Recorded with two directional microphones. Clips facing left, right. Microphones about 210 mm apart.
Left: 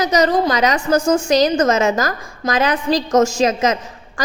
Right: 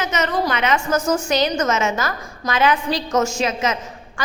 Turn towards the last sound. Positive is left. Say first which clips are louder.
# left 5 dB
turn(degrees=40)  # may be behind; listen again after turning